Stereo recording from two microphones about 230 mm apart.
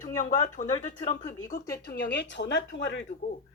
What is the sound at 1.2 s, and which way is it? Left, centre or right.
Speech, left.